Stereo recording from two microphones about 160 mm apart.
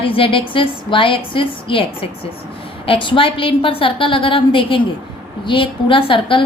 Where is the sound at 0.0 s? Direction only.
35° left (ahead or behind).